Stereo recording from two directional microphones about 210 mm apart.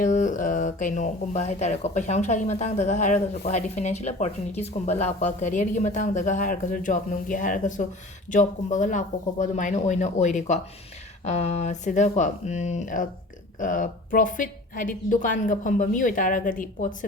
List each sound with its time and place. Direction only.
0.0 s a woman's voice: 35° left (ahead or behind)